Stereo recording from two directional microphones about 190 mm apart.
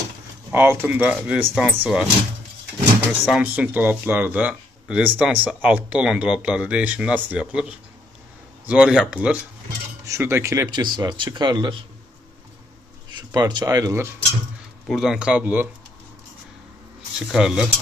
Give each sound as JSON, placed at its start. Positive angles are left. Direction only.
{"t": 0.5, "sound": "speech", "side_deg": -10}
{"t": 3.1, "sound": "speech", "side_deg": -5}
{"t": 13.3, "sound": "speech", "side_deg": -20}
{"t": 14.9, "sound": "speech", "side_deg": 0}
{"t": 17.3, "sound": "speech", "side_deg": -5}